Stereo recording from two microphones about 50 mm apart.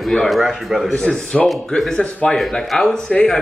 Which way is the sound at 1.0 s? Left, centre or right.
Centre.